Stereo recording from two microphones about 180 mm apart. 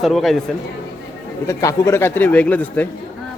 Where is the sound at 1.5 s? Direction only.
15° left (ahead or behind).